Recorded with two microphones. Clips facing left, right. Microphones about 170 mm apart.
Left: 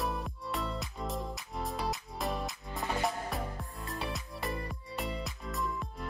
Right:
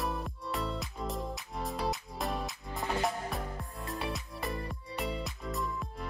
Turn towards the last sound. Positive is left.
turn(degrees=0)  # may be behind; listen again after turning